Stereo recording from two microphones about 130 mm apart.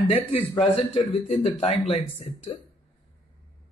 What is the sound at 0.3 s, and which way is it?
A man's voice, 45° left (ahead or behind).